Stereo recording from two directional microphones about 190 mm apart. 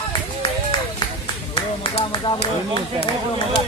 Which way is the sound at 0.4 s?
25° left (ahead or behind).